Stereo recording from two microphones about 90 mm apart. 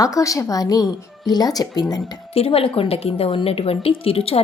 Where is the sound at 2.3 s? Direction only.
90° left.